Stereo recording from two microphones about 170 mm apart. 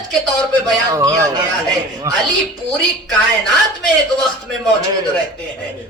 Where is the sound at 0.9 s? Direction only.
20° right (ahead or behind).